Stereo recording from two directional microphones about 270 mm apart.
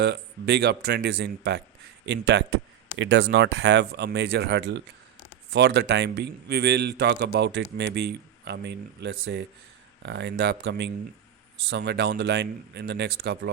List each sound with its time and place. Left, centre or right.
0.0 s a man's voice: right